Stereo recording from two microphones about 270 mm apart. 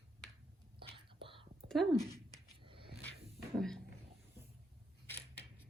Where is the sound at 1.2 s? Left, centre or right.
Centre.